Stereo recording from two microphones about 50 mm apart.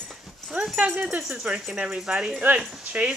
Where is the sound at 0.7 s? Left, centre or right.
Right.